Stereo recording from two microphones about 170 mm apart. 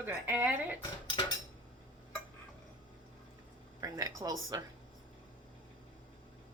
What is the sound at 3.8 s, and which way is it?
Speech, 20° right (ahead or behind).